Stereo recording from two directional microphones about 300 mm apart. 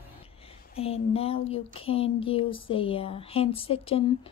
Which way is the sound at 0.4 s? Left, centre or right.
Centre.